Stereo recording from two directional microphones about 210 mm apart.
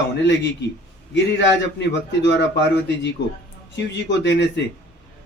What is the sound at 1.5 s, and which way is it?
Speech, 55° left (ahead or behind).